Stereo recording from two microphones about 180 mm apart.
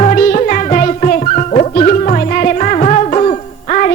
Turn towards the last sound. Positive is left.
turn(degrees=40)  # may be behind; listen again after turning